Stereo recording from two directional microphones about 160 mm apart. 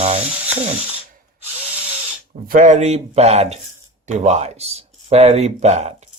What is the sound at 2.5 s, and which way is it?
Speech, 55° right (ahead or behind).